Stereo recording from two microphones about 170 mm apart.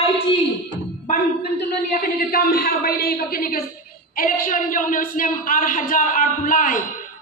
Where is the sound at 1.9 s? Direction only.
60° left (ahead or behind).